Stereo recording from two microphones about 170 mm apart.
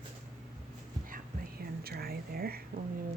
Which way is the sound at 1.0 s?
60° right (ahead or behind).